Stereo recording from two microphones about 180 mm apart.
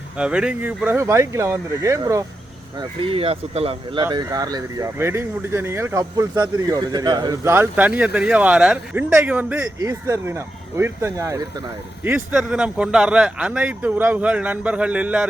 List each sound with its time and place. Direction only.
0.2 s speech: 5° right (ahead or behind)
2.7 s speech: 25° right (ahead or behind)
4.0 s speech: 20° right (ahead or behind)
12.0 s speech: 10° right (ahead or behind)